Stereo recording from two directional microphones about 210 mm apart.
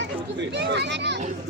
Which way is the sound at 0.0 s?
55° right (ahead or behind).